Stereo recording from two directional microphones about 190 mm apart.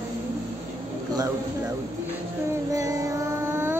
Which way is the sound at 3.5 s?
10° right (ahead or behind).